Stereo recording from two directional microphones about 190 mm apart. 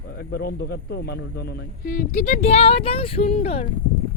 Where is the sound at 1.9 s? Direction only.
45° left (ahead or behind).